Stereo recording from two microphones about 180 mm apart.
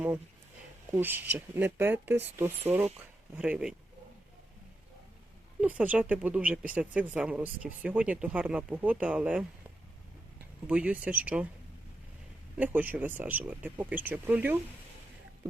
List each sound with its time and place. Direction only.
0.9 s speech: 10° right (ahead or behind)
5.5 s speech: 10° right (ahead or behind)
10.7 s speech: 5° right (ahead or behind)
12.5 s speech: 10° right (ahead or behind)